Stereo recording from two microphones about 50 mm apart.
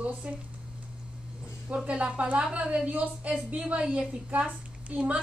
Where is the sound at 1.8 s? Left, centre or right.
Right.